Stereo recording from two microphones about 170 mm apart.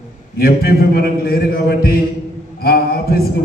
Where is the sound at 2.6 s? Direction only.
65° left (ahead or behind).